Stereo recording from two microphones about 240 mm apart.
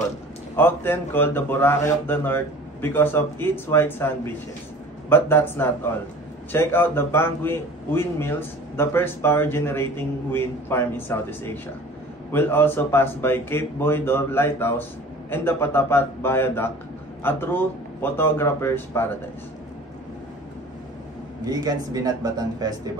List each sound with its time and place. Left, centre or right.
0.6 s a man's voice: centre
5.1 s a man's voice: centre
21.5 s speech: centre